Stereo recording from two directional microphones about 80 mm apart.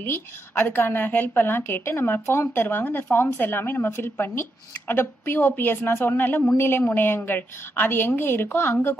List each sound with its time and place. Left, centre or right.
0.0 s a woman's voice: left